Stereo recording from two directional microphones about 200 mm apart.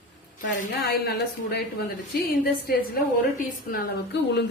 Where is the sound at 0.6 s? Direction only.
50° left (ahead or behind).